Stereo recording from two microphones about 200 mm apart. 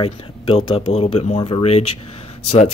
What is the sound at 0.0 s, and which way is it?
Speech, 30° left (ahead or behind).